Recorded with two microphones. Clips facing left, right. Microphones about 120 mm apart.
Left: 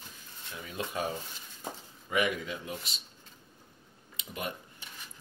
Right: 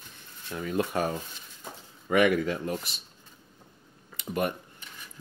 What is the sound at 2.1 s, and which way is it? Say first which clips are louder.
Speech: right 8 dB; 60° right (ahead or behind).